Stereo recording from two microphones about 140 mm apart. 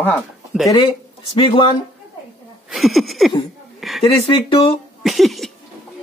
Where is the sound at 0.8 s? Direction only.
40° left (ahead or behind).